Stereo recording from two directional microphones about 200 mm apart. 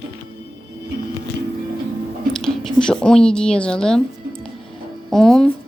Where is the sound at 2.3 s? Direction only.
5° left (ahead or behind).